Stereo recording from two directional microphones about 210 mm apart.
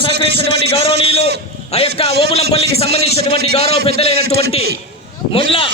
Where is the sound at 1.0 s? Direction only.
30° left (ahead or behind).